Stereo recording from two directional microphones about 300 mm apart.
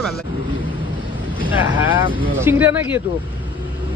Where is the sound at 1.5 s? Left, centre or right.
Centre.